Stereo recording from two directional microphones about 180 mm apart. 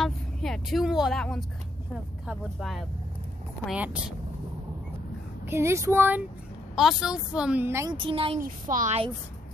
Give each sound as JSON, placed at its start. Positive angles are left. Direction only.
{"t": 0.0, "sound": "speech", "side_deg": 0}
{"t": 5.5, "sound": "speech", "side_deg": -15}
{"t": 8.0, "sound": "speech", "side_deg": -30}
{"t": 8.6, "sound": "a woman's voice", "side_deg": -45}